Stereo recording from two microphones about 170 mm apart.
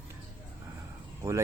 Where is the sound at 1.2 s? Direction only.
15° right (ahead or behind).